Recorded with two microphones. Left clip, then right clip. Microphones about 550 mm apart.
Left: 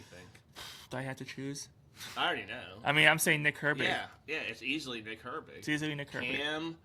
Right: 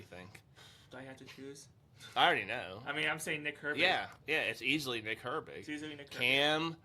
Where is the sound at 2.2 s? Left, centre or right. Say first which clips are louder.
Right 4 dB; right.